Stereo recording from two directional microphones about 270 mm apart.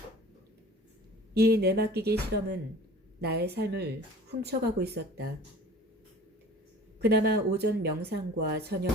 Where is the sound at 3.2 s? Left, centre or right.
Right.